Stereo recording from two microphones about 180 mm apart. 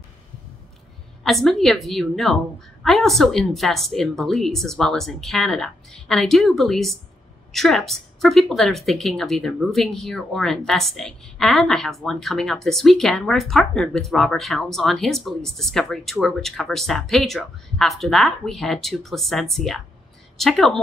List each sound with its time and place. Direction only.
1.2 s a woman's voice: centre (ahead or behind)